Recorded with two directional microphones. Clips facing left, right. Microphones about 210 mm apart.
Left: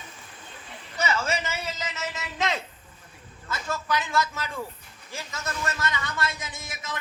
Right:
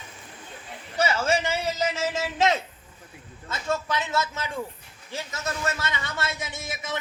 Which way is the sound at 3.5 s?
25° right (ahead or behind).